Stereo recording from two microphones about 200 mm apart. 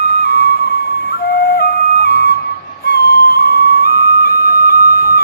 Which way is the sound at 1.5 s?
55° left (ahead or behind).